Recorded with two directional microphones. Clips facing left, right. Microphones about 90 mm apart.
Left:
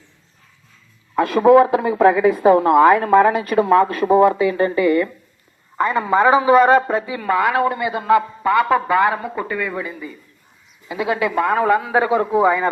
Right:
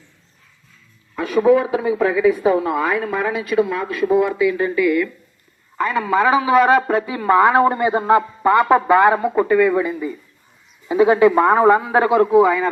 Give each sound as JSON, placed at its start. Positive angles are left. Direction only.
{"t": 1.1, "sound": "a woman's voice", "side_deg": 55}
{"t": 6.5, "sound": "speech", "side_deg": 0}
{"t": 7.0, "sound": "a man's voice", "side_deg": -20}
{"t": 10.8, "sound": "a man's voice", "side_deg": -30}